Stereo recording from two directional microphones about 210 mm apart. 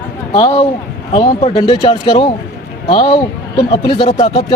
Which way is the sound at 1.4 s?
25° left (ahead or behind).